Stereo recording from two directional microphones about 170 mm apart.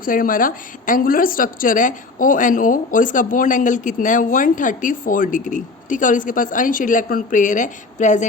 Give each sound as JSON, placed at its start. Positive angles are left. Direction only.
{"t": 0.0, "sound": "a woman's voice", "side_deg": 55}